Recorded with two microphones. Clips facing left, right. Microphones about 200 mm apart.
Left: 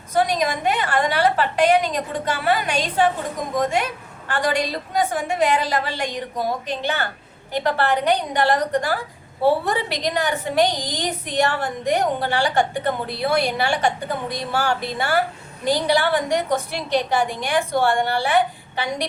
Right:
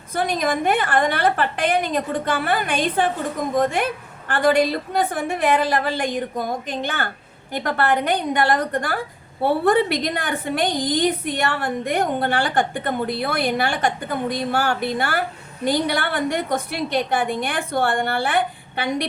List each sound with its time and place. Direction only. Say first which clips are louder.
0.1 s a woman's voice: left 1 dB; 55° right (ahead or behind)
4.3 s a woman's voice: right 5 dB; 55° right (ahead or behind)